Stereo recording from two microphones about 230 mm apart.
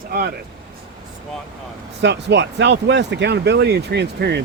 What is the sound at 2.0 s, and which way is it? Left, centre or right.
Speech, right.